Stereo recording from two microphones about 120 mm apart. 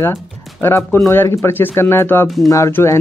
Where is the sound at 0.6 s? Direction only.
20° left (ahead or behind).